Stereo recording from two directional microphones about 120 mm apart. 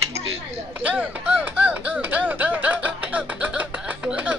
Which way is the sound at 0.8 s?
15° right (ahead or behind).